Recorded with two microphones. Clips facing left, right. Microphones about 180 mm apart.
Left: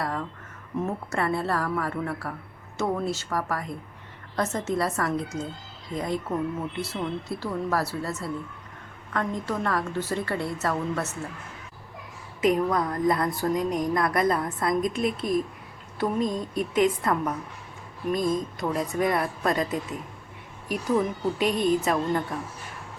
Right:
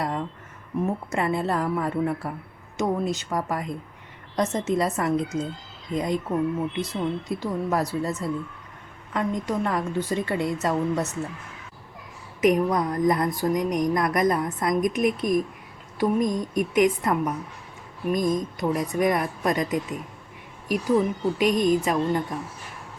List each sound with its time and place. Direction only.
0.0 s a sound: 20° right (ahead or behind)
1.1 s a woman's voice: 15° right (ahead or behind)
12.4 s a woman's voice: 20° right (ahead or behind)